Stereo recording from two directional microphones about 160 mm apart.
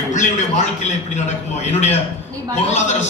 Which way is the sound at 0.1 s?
50° left (ahead or behind).